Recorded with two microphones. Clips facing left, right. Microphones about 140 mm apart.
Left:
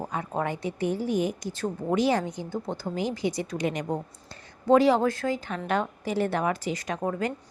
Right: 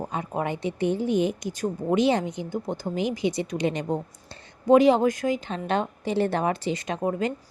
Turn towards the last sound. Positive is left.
turn(degrees=-20)  # may be behind; listen again after turning